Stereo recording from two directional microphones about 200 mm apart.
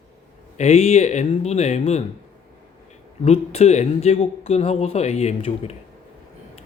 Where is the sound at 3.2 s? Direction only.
30° left (ahead or behind).